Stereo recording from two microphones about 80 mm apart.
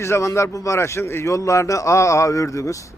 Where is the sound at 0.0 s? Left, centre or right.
Left.